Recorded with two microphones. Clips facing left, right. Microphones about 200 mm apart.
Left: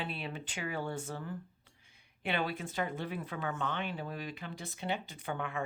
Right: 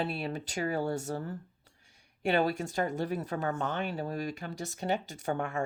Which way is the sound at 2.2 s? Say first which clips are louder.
Right 7 dB; 40° right (ahead or behind).